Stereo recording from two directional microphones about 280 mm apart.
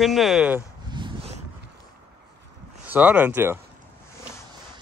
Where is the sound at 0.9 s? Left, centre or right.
Centre.